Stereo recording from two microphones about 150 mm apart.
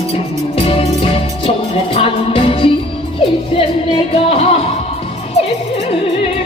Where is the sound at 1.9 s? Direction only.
40° left (ahead or behind).